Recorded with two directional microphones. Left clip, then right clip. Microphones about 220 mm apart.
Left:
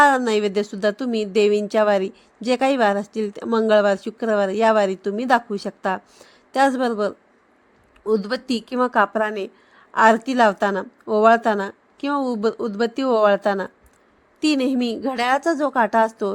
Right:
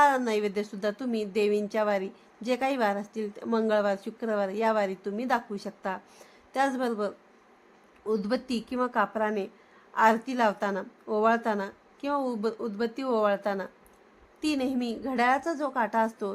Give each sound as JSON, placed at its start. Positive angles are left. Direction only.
{"t": 0.0, "sound": "a woman's voice", "side_deg": 30}